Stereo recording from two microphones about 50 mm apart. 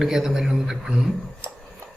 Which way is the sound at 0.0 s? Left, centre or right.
Centre.